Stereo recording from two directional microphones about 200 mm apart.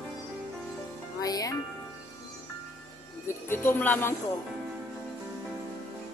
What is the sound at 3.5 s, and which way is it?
Speech, 10° left (ahead or behind).